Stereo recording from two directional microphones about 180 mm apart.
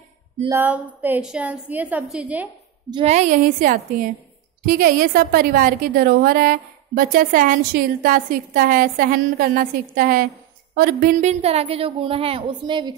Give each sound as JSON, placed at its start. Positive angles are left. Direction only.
{"t": 0.5, "sound": "a woman's voice", "side_deg": -10}
{"t": 2.9, "sound": "a woman's voice", "side_deg": -35}